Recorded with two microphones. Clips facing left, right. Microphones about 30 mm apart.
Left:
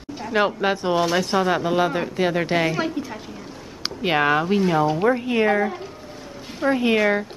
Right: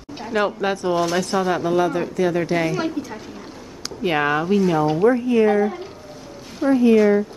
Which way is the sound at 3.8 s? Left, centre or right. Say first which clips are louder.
Even; left.